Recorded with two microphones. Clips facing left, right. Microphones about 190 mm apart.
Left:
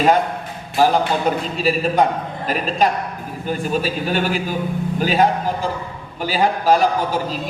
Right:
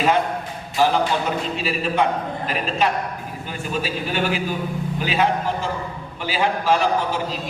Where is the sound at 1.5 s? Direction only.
40° left (ahead or behind).